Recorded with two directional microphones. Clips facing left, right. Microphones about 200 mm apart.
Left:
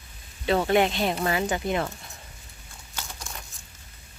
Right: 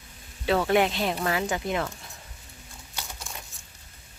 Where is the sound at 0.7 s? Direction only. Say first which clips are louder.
Left 1 dB; 5° right (ahead or behind).